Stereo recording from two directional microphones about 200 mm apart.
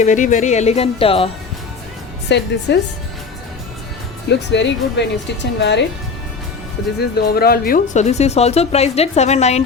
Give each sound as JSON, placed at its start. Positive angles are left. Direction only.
{"t": 0.0, "sound": "a woman's voice", "side_deg": 40}
{"t": 2.3, "sound": "speech", "side_deg": 60}
{"t": 4.3, "sound": "speech", "side_deg": 60}
{"t": 7.0, "sound": "speech", "side_deg": 50}
{"t": 8.0, "sound": "a woman's voice", "side_deg": 35}